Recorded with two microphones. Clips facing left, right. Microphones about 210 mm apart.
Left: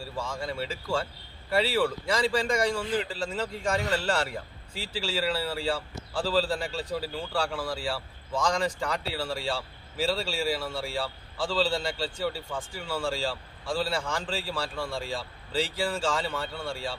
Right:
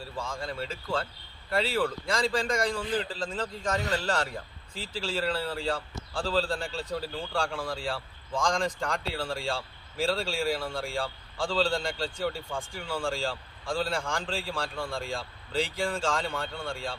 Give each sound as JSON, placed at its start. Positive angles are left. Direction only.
{"t": 0.2, "sound": "a man's voice", "side_deg": 10}